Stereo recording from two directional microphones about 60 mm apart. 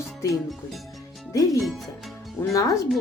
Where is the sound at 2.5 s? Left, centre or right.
Left.